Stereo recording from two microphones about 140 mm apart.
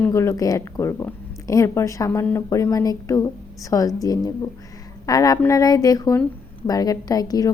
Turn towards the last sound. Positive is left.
turn(degrees=25)  # may be behind; listen again after turning